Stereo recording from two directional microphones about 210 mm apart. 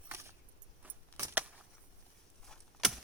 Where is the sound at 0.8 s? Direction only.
10° right (ahead or behind).